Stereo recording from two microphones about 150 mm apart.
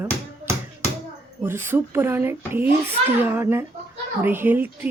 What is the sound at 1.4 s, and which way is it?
A child's voice, 15° right (ahead or behind).